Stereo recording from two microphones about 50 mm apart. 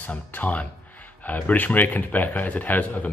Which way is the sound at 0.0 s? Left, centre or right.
Left.